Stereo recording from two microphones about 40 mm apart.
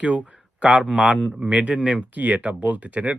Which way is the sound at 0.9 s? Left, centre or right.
Right.